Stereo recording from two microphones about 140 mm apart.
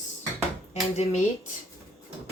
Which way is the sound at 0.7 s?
50° left (ahead or behind).